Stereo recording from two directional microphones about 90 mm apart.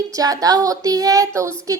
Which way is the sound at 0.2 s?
45° right (ahead or behind).